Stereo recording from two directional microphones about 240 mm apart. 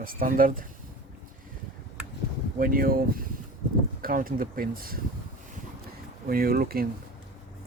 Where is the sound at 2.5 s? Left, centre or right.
Right.